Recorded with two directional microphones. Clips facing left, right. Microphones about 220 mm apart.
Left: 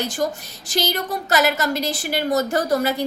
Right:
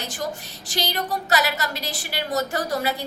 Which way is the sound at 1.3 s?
45° left (ahead or behind).